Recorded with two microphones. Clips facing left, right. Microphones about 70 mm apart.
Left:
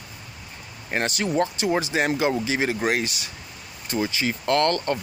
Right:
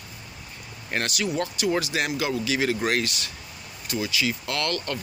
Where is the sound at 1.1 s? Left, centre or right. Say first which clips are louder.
Left 4 dB; left.